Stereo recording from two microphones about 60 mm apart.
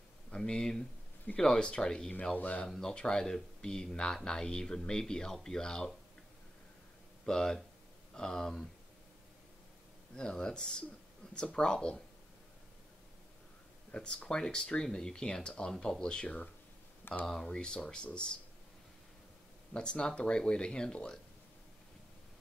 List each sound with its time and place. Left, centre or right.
0.3 s speech: centre
2.3 s speech: left
2.6 s speech: centre
7.2 s speech: centre
10.1 s speech: centre
13.9 s speech: centre
19.7 s speech: centre